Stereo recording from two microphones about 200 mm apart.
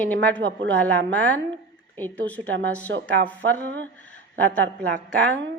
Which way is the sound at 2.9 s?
65° right (ahead or behind).